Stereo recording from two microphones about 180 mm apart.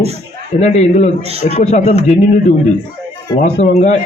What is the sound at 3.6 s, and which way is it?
Speech, 40° left (ahead or behind).